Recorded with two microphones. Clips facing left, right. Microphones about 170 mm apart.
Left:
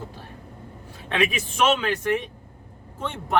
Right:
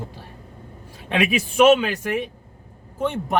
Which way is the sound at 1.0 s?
15° right (ahead or behind).